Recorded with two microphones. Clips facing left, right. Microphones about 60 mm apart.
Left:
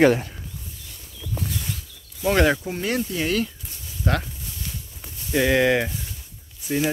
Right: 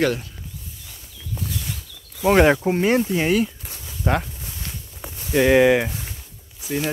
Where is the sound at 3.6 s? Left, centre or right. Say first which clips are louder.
Right 4 dB; right.